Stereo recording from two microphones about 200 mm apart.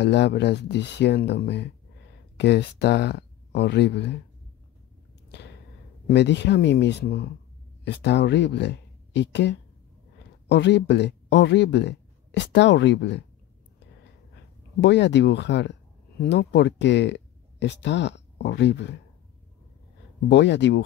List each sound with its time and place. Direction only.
0.0 s speech: 55° left (ahead or behind)
6.0 s speech: 60° left (ahead or behind)
14.8 s speech: 60° left (ahead or behind)
20.2 s speech: 60° left (ahead or behind)